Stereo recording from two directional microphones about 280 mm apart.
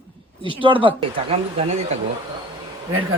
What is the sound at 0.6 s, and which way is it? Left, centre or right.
Speech, centre.